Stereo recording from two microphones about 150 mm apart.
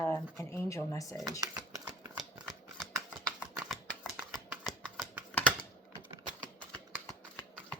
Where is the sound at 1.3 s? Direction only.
25° right (ahead or behind).